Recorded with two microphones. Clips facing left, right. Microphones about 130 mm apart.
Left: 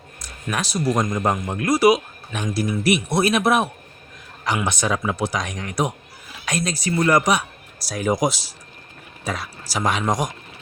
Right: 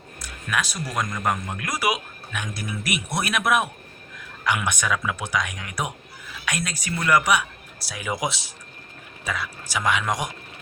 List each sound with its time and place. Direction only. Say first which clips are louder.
0.5 s speech: left 5 dB; 35° left (ahead or behind)
1.0 s speech: left 4 dB; 25° left (ahead or behind); by 10.3 s 40° left (ahead or behind)